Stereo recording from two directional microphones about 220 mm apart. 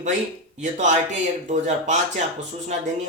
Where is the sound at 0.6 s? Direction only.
30° right (ahead or behind).